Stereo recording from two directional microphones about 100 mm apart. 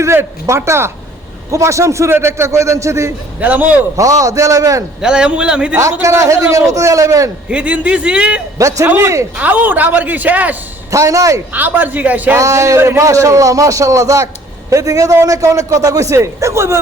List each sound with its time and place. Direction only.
0.0 s a man's voice: 25° right (ahead or behind)
3.4 s a man's voice: 15° right (ahead or behind)
3.9 s a man's voice: 35° right (ahead or behind)
4.9 s a man's voice: 5° right (ahead or behind)
5.7 s a man's voice: 30° right (ahead or behind)
7.4 s a man's voice: 10° right (ahead or behind)
8.5 s a man's voice: 35° right (ahead or behind); by 10.6 s 15° right (ahead or behind)
10.9 s a man's voice: 35° right (ahead or behind)
11.5 s a man's voice: 20° right (ahead or behind)
12.4 s a man's voice: 30° right (ahead or behind)